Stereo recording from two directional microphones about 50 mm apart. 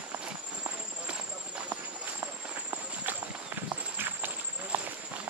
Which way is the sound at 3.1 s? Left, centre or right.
Right.